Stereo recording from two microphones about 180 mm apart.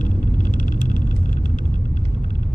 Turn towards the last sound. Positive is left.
turn(degrees=45)  # may be behind; listen again after turning